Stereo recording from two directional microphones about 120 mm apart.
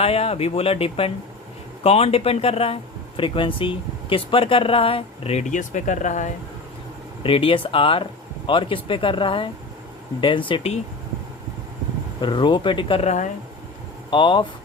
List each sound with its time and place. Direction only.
0.0 s speech: 55° left (ahead or behind); by 6.3 s 85° left
7.2 s speech: 50° left (ahead or behind)
12.2 s speech: 40° left (ahead or behind)
13.0 s speech: 80° left
14.1 s speech: 40° left (ahead or behind)